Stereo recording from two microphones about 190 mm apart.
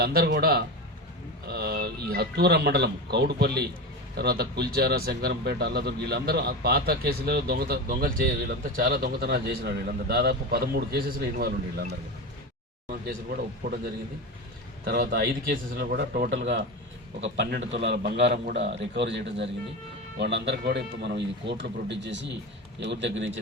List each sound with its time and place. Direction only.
0.0 s a man's voice: 55° right (ahead or behind)
14.8 s a man's voice: 55° right (ahead or behind); by 23.3 s 70° right (ahead or behind)